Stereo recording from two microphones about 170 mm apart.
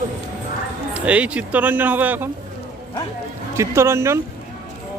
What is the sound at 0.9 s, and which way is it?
Speech, 5° right (ahead or behind).